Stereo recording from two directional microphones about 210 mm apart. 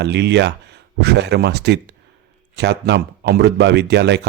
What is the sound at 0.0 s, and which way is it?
Speech, 55° right (ahead or behind).